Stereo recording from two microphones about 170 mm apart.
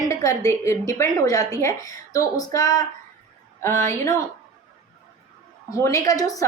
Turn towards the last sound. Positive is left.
turn(degrees=20)  # may be behind; listen again after turning